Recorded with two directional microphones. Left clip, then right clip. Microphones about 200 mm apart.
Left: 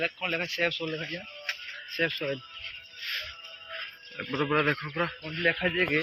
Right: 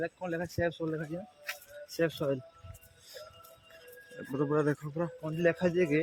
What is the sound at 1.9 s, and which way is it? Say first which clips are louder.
Speech: left 3 dB; 80° right.